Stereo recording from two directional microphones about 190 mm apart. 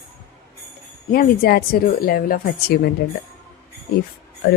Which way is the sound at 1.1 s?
50° left (ahead or behind).